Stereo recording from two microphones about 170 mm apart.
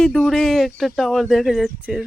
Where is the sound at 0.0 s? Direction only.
Centre (ahead or behind).